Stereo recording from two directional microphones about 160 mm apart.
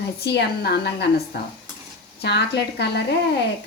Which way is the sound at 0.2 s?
90° left.